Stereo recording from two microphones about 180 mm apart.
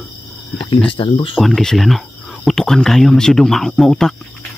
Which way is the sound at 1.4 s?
Centre (ahead or behind).